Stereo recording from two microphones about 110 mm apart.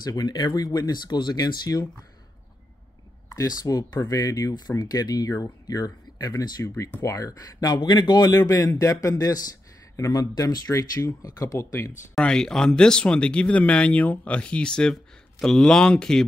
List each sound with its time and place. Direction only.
0.0 s speech: 35° left (ahead or behind)
3.3 s speech: 35° left (ahead or behind)
12.2 s speech: 5° left (ahead or behind)